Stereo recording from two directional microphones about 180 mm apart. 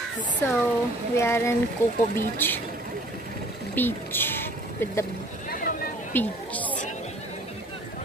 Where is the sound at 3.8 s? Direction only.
10° left (ahead or behind).